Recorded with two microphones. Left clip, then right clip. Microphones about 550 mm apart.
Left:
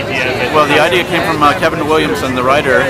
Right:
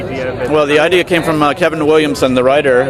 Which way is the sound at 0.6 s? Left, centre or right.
Right.